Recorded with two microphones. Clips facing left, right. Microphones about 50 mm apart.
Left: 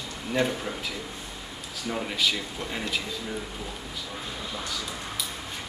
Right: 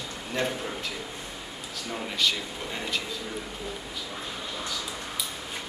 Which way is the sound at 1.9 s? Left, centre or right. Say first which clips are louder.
Left 1 dB; centre.